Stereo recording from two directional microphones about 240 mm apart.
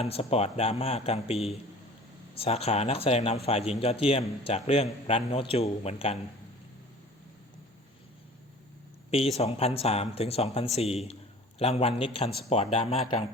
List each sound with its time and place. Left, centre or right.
0.0 s a man's voice: left
9.0 s a man's voice: left